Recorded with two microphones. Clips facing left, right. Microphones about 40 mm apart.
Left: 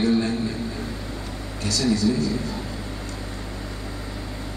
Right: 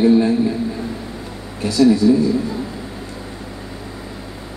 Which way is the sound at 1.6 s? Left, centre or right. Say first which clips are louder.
Right 9 dB; centre.